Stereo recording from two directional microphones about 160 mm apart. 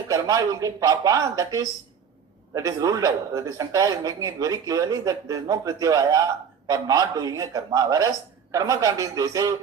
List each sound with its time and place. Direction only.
0.1 s speech: 20° right (ahead or behind)